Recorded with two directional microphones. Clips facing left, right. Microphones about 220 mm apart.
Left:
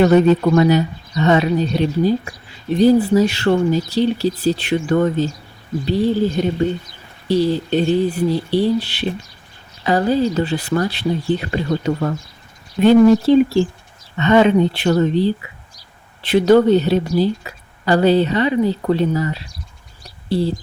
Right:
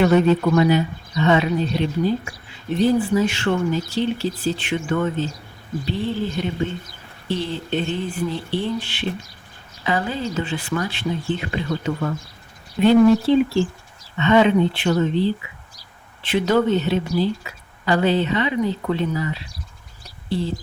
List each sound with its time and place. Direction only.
0.0 s speech: 40° left (ahead or behind)